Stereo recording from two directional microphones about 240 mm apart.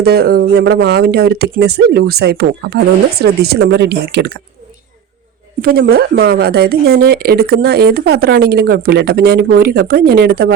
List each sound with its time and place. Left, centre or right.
0.0 s speech: right
5.6 s speech: right